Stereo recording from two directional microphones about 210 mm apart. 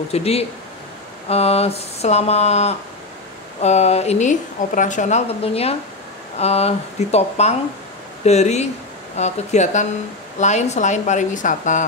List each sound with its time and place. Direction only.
0.1 s a woman's voice: 30° left (ahead or behind)